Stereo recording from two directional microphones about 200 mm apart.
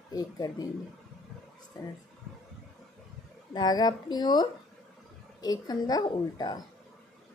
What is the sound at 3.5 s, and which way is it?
A woman's voice, 20° left (ahead or behind).